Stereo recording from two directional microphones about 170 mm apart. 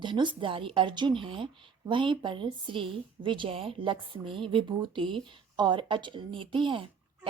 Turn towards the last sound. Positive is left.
turn(degrees=-30)  # may be behind; listen again after turning